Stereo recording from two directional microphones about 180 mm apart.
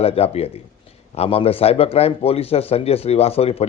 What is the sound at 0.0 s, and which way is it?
A man's voice, 35° left (ahead or behind).